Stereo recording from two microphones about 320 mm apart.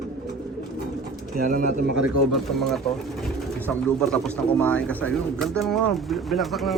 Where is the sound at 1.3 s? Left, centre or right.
Right.